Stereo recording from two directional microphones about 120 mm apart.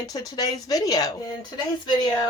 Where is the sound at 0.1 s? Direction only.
30° left (ahead or behind).